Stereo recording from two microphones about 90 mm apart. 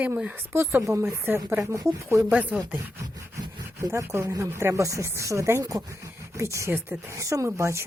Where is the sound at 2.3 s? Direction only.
15° right (ahead or behind).